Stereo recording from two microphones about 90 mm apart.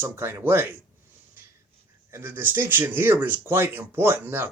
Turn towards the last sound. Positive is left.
turn(degrees=-25)  # may be behind; listen again after turning